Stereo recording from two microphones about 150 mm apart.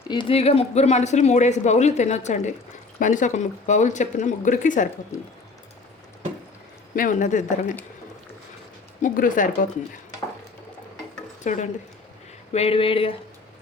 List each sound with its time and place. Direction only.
0.1 s speech: 35° left (ahead or behind); by 4.9 s 60° left (ahead or behind)
6.9 s speech: 60° left (ahead or behind)
9.0 s speech: 60° left (ahead or behind)
11.4 s speech: 55° left (ahead or behind)
12.5 s a sound: 40° left (ahead or behind)